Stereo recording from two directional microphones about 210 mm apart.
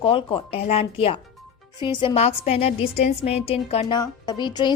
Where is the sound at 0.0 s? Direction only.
25° left (ahead or behind).